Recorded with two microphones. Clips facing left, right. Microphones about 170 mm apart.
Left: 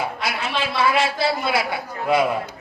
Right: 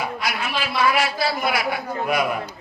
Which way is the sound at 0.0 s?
25° left (ahead or behind).